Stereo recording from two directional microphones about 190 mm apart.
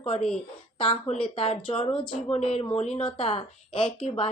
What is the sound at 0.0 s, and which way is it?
A woman's voice, 35° left (ahead or behind).